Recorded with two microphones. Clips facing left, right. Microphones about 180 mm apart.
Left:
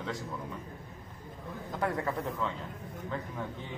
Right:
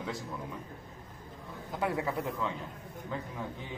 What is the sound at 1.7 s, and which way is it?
Speech, 10° right (ahead or behind).